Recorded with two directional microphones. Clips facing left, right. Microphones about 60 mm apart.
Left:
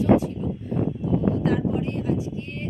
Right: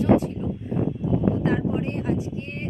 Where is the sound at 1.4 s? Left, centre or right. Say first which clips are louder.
Even; right.